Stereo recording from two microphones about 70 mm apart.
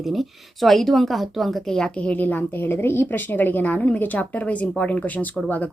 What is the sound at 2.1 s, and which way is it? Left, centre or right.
A woman's voice, left.